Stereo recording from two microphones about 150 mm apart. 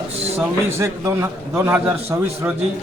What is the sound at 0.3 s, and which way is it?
A man's voice, 15° right (ahead or behind).